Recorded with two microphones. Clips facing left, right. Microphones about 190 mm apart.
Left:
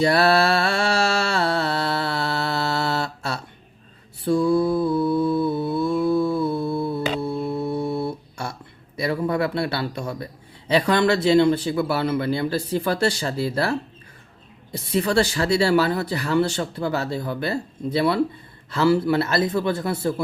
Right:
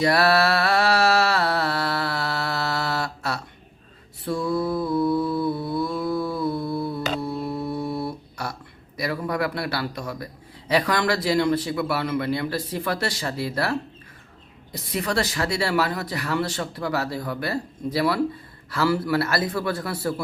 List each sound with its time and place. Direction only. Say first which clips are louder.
0.0 s mantra: left 2 dB; 30° left (ahead or behind)
7.3 s a sound: left 3 dB; 25° left (ahead or behind)
9.0 s speech: left 3 dB; 25° left (ahead or behind)